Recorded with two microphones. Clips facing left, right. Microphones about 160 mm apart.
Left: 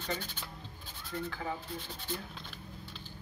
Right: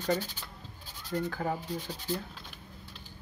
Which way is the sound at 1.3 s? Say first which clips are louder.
Right 5 dB; 45° right (ahead or behind).